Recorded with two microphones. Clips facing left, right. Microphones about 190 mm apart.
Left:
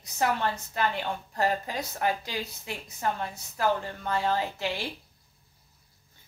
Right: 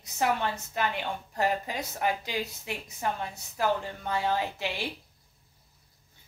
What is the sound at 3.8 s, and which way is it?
Speech, 15° right (ahead or behind).